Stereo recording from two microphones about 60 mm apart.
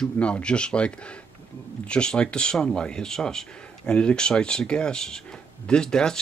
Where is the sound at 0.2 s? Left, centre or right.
Centre.